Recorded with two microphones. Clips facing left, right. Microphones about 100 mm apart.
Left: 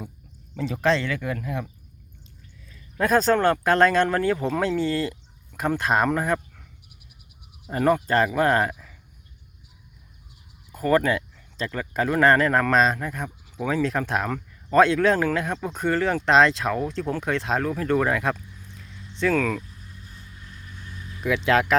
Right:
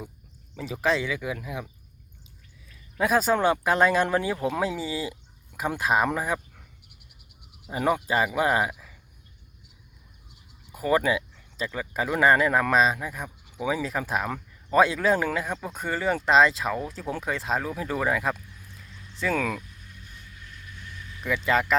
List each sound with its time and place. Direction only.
0.5 s speech: 5° right (ahead or behind)
2.7 s speech: 5° right (ahead or behind)
7.7 s speech: 10° right (ahead or behind)
10.7 s speech: 10° right (ahead or behind)
19.9 s vehicle: 30° left (ahead or behind)
21.2 s speech: centre (ahead or behind)